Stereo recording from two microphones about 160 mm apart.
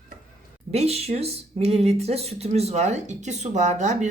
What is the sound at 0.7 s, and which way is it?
Speech, 40° right (ahead or behind).